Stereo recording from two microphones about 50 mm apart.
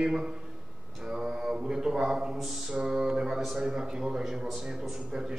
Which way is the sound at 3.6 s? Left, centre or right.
Centre.